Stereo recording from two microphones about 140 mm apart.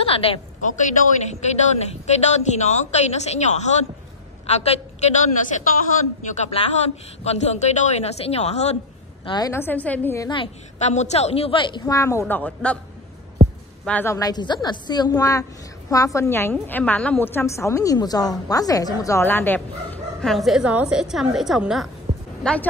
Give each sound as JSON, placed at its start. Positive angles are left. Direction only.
{"t": 0.0, "sound": "a sound", "side_deg": 40}
{"t": 0.6, "sound": "a man's voice", "side_deg": 60}
{"t": 6.3, "sound": "a man's voice", "side_deg": 55}
{"t": 9.2, "sound": "a woman's voice", "side_deg": 30}
{"t": 9.5, "sound": "a woman's voice", "side_deg": 15}
{"t": 10.8, "sound": "a man's voice", "side_deg": 55}
{"t": 11.8, "sound": "a woman's voice", "side_deg": 20}
{"t": 13.8, "sound": "a woman's voice", "side_deg": 15}
{"t": 22.1, "sound": "a sound", "side_deg": -70}
{"t": 22.4, "sound": "speech", "side_deg": 5}